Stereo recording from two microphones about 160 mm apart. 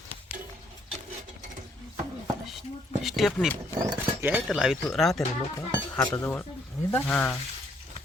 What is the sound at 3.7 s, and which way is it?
Speech, 20° right (ahead or behind).